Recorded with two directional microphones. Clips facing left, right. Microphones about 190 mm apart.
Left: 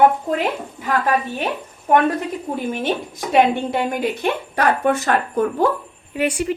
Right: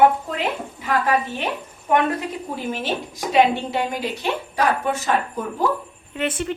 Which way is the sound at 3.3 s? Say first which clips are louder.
Left 2 dB; 55° left (ahead or behind).